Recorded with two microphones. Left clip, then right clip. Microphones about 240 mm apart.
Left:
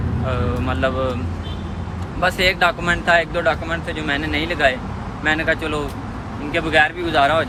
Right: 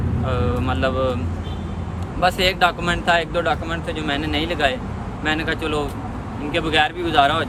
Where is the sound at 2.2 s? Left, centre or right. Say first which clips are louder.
Left 1 dB; centre.